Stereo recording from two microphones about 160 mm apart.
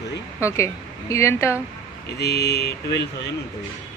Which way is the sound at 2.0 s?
90° left.